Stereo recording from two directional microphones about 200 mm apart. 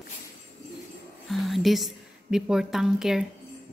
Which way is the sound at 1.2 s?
Centre (ahead or behind).